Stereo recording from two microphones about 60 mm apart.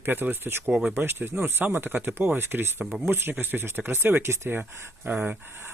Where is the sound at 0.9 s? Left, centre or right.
Right.